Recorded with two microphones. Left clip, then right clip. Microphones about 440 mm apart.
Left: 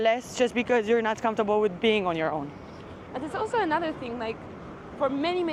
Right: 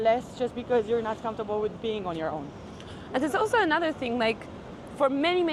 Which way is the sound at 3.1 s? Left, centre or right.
Right.